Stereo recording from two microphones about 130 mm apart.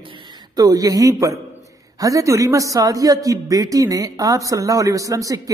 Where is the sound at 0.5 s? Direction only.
30° right (ahead or behind).